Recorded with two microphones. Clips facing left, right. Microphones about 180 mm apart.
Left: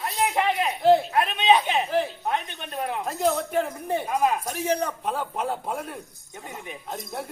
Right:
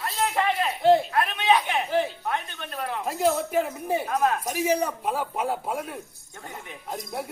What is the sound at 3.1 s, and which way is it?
Speech, centre (ahead or behind).